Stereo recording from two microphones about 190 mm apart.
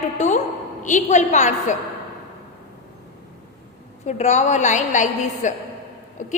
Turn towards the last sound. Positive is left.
turn(degrees=40)  # may be behind; listen again after turning